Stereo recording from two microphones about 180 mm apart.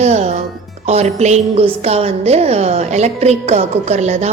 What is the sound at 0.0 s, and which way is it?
A woman's voice, 35° right (ahead or behind).